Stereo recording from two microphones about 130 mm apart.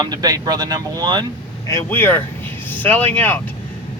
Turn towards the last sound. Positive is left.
turn(degrees=15)  # may be behind; listen again after turning